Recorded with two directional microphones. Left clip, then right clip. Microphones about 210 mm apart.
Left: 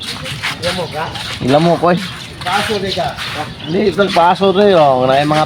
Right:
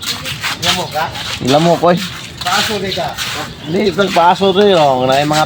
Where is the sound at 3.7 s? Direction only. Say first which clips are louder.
Even; 10° right (ahead or behind).